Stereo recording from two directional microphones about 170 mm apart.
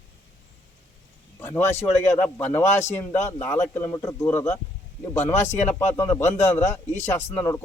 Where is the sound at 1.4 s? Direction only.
15° left (ahead or behind).